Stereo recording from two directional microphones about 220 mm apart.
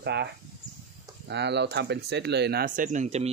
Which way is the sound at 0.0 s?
50° right (ahead or behind).